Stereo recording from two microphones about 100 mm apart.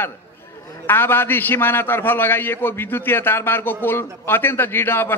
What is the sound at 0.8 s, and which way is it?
A man's voice, 20° left (ahead or behind).